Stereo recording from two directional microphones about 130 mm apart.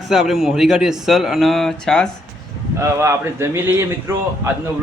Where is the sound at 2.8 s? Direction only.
20° right (ahead or behind).